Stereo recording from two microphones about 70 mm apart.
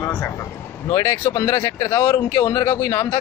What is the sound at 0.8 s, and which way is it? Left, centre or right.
Speech, left.